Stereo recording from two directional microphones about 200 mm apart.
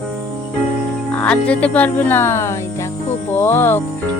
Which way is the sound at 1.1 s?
5° left (ahead or behind).